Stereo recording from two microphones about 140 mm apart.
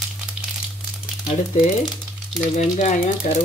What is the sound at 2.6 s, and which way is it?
Speech, 55° left (ahead or behind).